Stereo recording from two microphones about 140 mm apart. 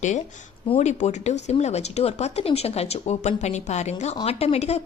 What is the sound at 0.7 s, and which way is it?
Speech, 55° left (ahead or behind).